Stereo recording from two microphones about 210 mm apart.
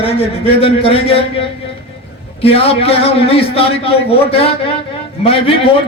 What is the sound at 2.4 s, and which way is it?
A man's voice, 25° left (ahead or behind).